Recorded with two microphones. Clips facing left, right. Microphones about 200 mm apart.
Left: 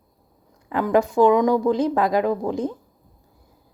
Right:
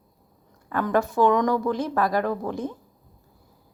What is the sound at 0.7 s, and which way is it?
Speech, 15° left (ahead or behind).